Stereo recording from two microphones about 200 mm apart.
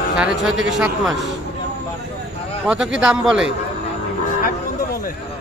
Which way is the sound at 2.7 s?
5° right (ahead or behind).